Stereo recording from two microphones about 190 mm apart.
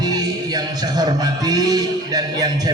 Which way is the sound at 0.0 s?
20° right (ahead or behind).